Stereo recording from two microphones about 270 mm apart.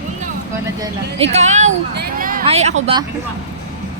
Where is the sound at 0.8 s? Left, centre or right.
Right.